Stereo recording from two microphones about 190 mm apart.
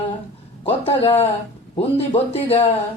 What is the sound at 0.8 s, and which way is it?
Speech, 30° left (ahead or behind).